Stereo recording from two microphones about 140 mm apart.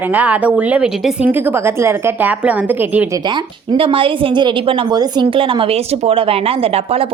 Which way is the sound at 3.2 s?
35° right (ahead or behind).